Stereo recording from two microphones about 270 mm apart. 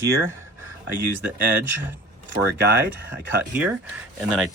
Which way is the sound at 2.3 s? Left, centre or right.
Right.